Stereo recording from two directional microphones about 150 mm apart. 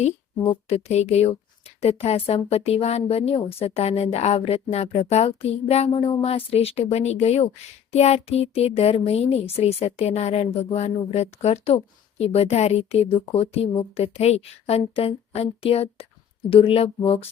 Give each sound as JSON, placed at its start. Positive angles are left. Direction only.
{"t": 0.7, "sound": "speech", "side_deg": 45}